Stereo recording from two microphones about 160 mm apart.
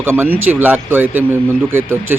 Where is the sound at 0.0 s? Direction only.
15° right (ahead or behind).